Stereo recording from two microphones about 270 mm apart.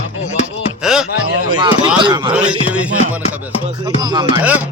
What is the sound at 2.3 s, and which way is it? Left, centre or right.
Speech, centre.